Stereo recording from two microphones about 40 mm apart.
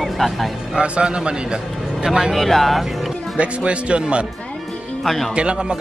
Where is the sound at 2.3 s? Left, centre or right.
Centre.